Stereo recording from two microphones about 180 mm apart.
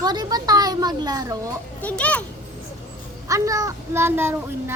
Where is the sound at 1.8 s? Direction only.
5° left (ahead or behind).